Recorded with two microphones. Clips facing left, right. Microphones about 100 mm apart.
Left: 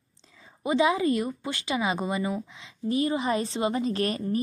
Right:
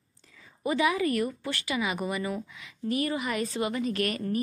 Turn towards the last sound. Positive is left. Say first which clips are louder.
# left 2 dB
turn(degrees=30)  # may be behind; listen again after turning